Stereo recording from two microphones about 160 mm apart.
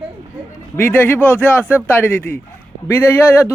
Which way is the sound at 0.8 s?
10° left (ahead or behind).